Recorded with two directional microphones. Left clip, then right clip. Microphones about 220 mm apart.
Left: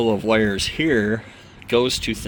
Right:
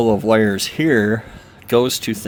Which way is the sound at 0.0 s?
40° right (ahead or behind).